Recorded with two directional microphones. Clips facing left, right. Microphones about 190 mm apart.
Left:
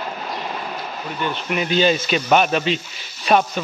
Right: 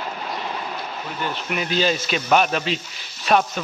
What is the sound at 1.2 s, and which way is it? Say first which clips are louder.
Speech: left 3 dB; centre (ahead or behind).